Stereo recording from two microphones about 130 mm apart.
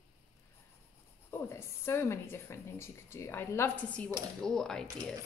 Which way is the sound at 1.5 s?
20° left (ahead or behind).